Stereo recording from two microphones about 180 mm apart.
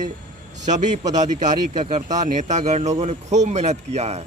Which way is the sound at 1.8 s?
40° right (ahead or behind).